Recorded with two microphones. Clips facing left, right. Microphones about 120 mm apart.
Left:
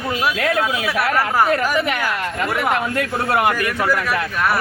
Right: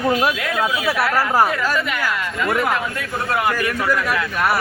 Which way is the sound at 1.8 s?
60° left (ahead or behind).